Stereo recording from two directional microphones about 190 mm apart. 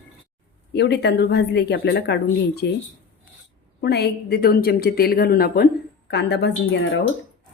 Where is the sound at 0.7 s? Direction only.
60° left (ahead or behind).